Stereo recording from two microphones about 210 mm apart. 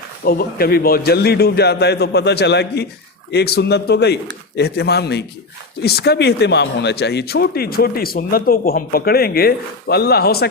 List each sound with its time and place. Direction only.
0.3 s a man's voice: 45° left (ahead or behind)